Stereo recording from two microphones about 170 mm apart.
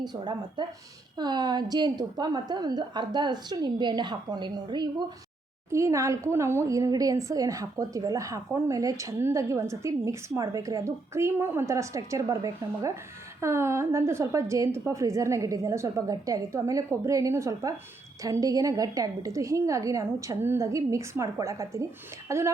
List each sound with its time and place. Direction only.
0.0 s a woman's voice: 25° right (ahead or behind)